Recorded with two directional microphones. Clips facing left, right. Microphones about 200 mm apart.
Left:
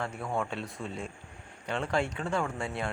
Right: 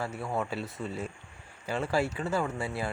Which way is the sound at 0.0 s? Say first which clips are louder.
Even; 5° right (ahead or behind).